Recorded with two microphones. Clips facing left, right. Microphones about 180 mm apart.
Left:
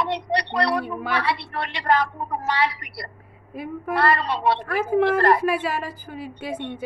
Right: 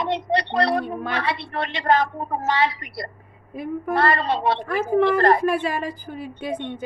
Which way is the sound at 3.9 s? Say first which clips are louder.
Right 1 dB; 25° right (ahead or behind).